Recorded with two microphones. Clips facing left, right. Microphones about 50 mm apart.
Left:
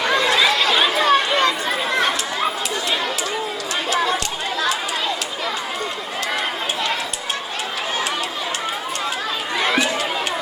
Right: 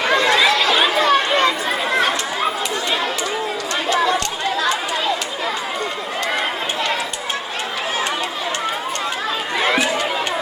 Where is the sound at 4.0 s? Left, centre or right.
Centre.